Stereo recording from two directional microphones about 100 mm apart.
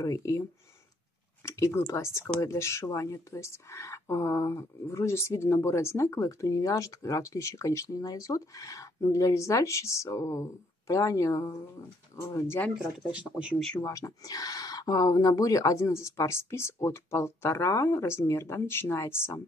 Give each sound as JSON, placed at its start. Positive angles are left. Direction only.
{"t": 0.0, "sound": "speech", "side_deg": 35}
{"t": 12.7, "sound": "speech", "side_deg": -10}
{"t": 13.7, "sound": "speech", "side_deg": 30}